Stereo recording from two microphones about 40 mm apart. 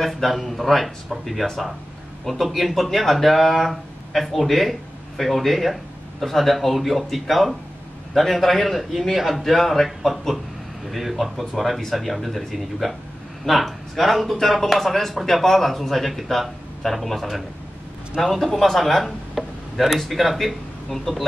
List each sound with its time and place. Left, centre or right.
0.0 s speech: centre
2.5 s speech: centre
19.3 s speech: centre